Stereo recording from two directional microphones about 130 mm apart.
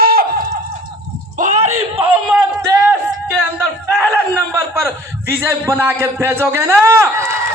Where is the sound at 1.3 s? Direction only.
65° right (ahead or behind).